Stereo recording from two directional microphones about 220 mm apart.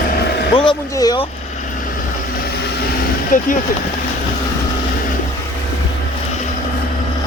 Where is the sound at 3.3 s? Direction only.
35° left (ahead or behind).